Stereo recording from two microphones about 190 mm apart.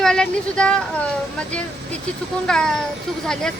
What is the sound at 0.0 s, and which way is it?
Speech, 5° left (ahead or behind).